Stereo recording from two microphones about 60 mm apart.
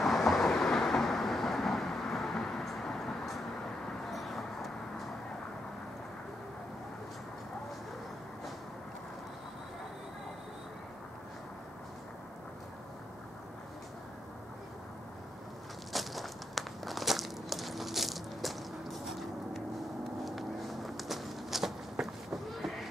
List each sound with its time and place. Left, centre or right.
0.0 s train: centre
4.1 s vehicle: centre
15.9 s crumpling: centre
20.2 s walk: centre